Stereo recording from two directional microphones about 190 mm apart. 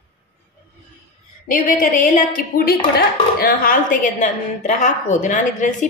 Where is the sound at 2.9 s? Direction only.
50° left (ahead or behind).